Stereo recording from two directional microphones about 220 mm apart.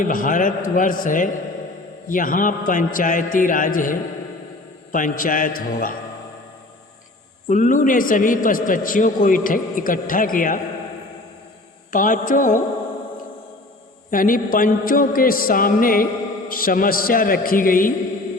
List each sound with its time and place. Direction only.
0.0 s a man's voice: 40° left (ahead or behind)
7.4 s a man's voice: 35° left (ahead or behind)
11.9 s a man's voice: 35° left (ahead or behind)
14.1 s a man's voice: 40° left (ahead or behind)